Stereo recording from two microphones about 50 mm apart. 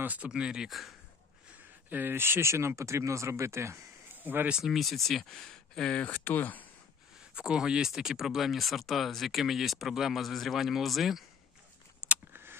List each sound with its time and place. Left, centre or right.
0.0 s speech: right
0.3 s speech: centre
0.7 s speech: centre
1.9 s speech: right
4.2 s speech: right
4.5 s speech: centre
4.7 s speech: centre
6.0 s speech: left
7.3 s speech: centre
12.3 s a sound: right